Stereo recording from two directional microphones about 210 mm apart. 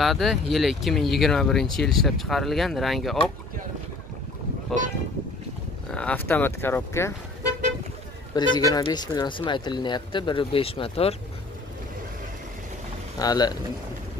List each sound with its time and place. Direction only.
0.0 s speech: centre (ahead or behind)
4.7 s speech: centre (ahead or behind)
8.4 s speech: 20° left (ahead or behind)
13.2 s speech: 20° left (ahead or behind)